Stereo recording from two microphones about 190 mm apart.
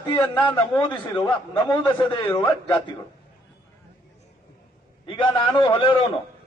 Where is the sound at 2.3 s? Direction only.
15° left (ahead or behind).